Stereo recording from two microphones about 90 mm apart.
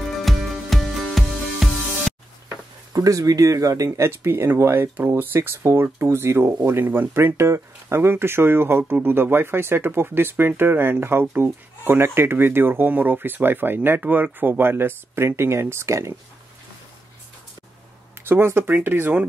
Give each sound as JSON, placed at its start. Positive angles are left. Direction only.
{"t": 0.2, "sound": "music", "side_deg": 0}
{"t": 2.5, "sound": "speech", "side_deg": -40}
{"t": 18.3, "sound": "speech", "side_deg": -25}